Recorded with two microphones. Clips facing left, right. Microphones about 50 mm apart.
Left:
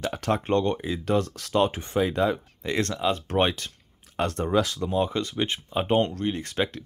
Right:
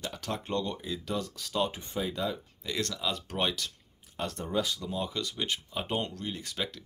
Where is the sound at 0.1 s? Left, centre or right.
Left.